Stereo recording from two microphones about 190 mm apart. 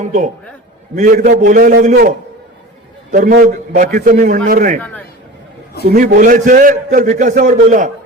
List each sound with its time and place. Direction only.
0.0 s a man's voice: 40° right (ahead or behind)
3.1 s a man's voice: 45° right (ahead or behind)
4.8 s chatter: 10° left (ahead or behind)
5.8 s a man's voice: 50° right (ahead or behind)